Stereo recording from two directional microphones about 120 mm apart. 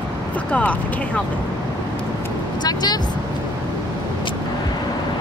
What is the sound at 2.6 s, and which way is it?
Speech, 35° left (ahead or behind).